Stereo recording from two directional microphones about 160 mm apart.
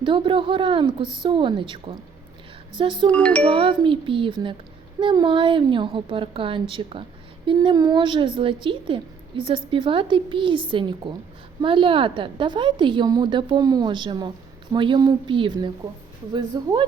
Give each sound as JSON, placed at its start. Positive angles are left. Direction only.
{"t": 0.0, "sound": "a woman's voice", "side_deg": -30}
{"t": 3.1, "sound": "music", "side_deg": 10}
{"t": 3.5, "sound": "a woman's voice", "side_deg": -35}